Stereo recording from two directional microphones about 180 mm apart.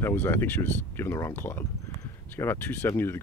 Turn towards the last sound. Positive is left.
turn(degrees=15)  # may be behind; listen again after turning